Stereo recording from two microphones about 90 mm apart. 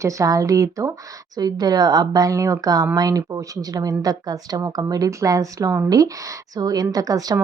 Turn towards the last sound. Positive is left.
turn(degrees=-40)  # may be behind; listen again after turning